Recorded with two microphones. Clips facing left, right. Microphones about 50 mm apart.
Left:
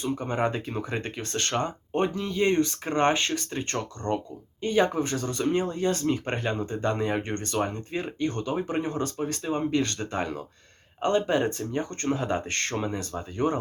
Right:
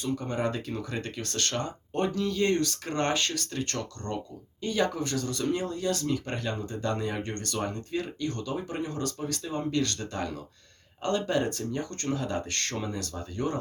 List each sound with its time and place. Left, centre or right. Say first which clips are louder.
0.0 s speech: left 3 dB; left